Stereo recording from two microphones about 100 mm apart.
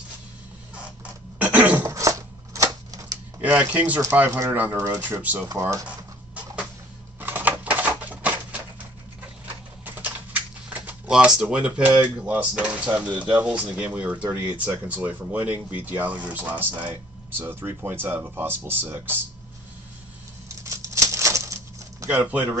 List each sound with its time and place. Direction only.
1.4 s cough: 15° right (ahead or behind)
2.0 s a sound: 30° right (ahead or behind)
3.3 s speech: 15° right (ahead or behind)
5.6 s speech: 30° right (ahead or behind)
6.3 s a sound: 15° right (ahead or behind)
7.2 s typewriter: 20° right (ahead or behind)
9.8 s typing: 15° right (ahead or behind)
11.1 s speech: 10° right (ahead or behind)
20.6 s patter: 30° right (ahead or behind)
22.1 s speech: 15° right (ahead or behind)